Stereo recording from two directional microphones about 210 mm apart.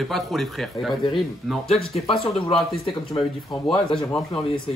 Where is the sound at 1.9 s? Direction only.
30° left (ahead or behind).